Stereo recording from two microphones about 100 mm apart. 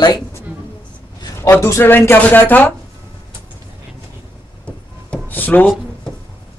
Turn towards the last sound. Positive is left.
turn(degrees=15)  # may be behind; listen again after turning